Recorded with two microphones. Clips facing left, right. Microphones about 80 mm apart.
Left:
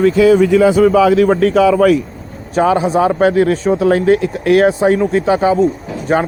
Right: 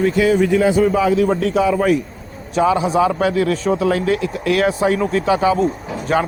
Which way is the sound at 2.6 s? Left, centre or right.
Left.